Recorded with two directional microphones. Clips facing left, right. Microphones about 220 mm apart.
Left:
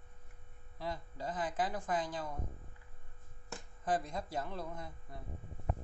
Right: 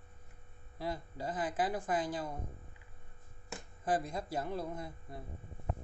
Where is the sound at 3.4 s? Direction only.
5° right (ahead or behind).